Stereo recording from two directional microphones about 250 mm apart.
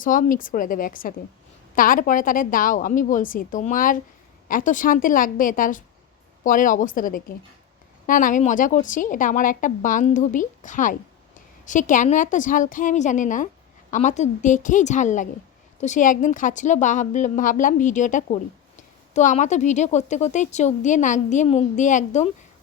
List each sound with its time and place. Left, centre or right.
0.0 s a woman's voice: left